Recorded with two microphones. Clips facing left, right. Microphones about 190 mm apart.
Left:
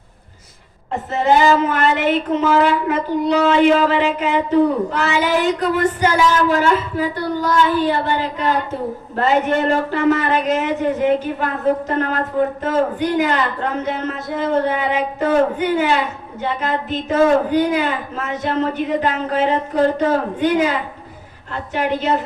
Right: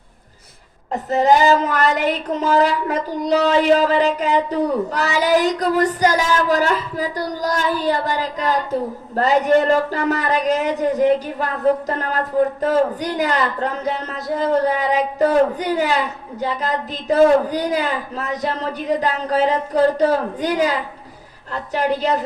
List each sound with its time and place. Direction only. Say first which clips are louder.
0.9 s speech: right 2 dB; 40° right (ahead or behind)